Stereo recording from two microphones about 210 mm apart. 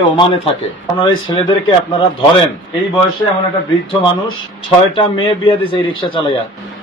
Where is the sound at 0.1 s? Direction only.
25° left (ahead or behind).